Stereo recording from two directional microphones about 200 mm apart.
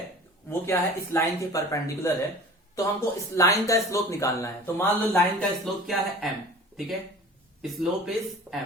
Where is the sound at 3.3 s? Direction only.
15° left (ahead or behind); by 6.3 s centre (ahead or behind).